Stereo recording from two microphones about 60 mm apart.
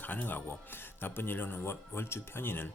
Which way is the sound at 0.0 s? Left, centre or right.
Left.